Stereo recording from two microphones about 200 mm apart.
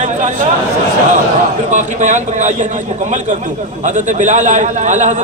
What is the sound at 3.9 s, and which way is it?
A man's voice, 40° right (ahead or behind).